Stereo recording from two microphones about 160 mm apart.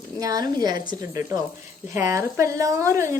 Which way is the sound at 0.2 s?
20° right (ahead or behind).